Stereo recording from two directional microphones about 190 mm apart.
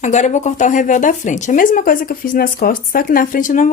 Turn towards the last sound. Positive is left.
turn(degrees=40)  # may be behind; listen again after turning